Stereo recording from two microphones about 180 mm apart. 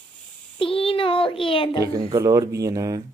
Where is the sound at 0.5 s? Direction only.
30° left (ahead or behind).